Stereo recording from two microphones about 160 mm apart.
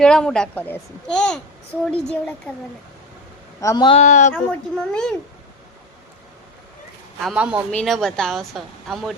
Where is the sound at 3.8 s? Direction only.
40° left (ahead or behind).